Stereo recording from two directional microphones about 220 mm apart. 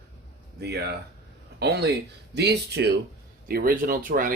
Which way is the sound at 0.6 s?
50° right (ahead or behind).